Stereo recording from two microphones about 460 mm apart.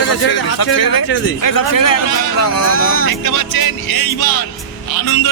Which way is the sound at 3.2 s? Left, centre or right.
Left.